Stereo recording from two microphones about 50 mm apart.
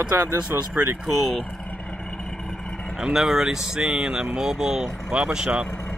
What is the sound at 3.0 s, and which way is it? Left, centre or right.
Speech, centre.